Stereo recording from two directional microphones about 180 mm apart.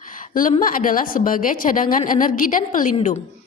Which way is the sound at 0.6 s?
50° left (ahead or behind).